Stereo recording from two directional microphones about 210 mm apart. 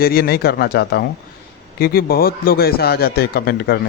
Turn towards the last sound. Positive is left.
turn(degrees=50)  # may be behind; listen again after turning